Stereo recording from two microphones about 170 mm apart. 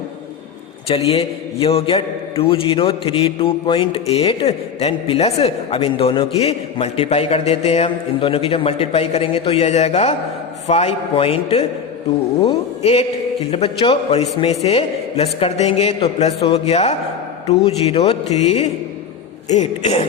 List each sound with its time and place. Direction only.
0.9 s a man's voice: 35° left (ahead or behind)